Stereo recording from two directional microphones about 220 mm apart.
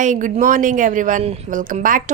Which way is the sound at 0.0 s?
35° right (ahead or behind).